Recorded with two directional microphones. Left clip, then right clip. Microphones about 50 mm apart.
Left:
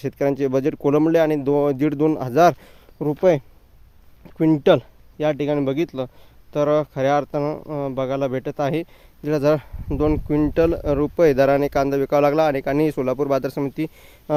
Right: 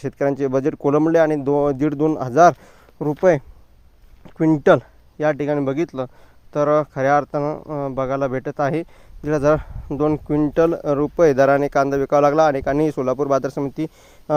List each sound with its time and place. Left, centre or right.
0.0 s speech: centre
1.5 s speech: centre
2.1 s speech: centre
3.0 s speech: right
4.4 s speech: centre
4.6 s speech: right
7.4 s speech: centre
7.9 s speech: right
8.9 s speech: centre
9.3 s speech: right
9.6 s speech: centre
10.5 s speech: right
12.8 s speech: centre